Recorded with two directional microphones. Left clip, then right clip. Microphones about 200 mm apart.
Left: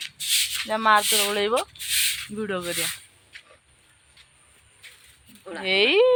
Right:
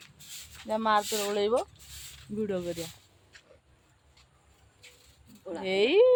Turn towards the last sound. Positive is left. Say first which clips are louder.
# left 4 dB
turn(degrees=10)  # may be behind; listen again after turning